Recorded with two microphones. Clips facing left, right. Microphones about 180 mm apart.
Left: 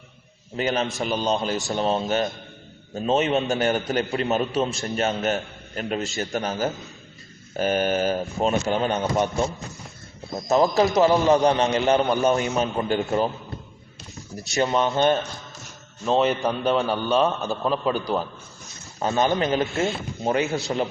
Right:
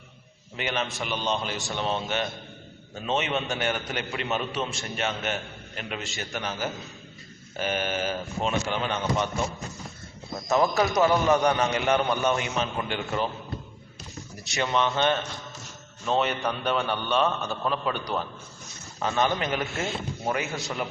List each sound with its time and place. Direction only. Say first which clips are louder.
0.5 s a man's voice: left 6 dB; 40° left (ahead or behind)
10.5 s a man's voice: left 4 dB; 30° left (ahead or behind)
14.5 s a man's voice: left 4 dB; 35° left (ahead or behind)
16.0 s a man's voice: left 5 dB; 30° left (ahead or behind)